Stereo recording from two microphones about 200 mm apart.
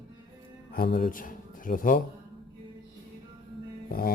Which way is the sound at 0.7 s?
50° left (ahead or behind).